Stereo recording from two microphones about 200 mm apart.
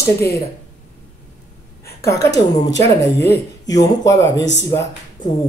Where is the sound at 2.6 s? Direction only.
15° left (ahead or behind).